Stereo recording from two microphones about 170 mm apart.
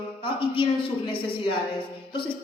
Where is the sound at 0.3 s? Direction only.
30° left (ahead or behind).